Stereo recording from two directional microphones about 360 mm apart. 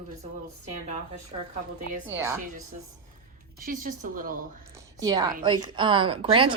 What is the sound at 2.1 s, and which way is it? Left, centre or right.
Speech, centre.